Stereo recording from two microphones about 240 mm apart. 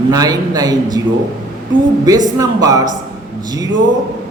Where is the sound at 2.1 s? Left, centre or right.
Centre.